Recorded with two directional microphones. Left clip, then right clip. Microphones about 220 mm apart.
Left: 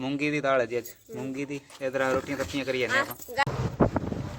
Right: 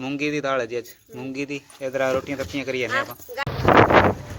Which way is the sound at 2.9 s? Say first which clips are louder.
Right 2 dB; 40° left (ahead or behind).